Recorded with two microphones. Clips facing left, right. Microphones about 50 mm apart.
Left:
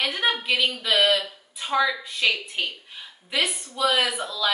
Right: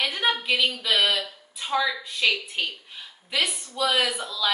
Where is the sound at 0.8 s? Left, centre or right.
Centre.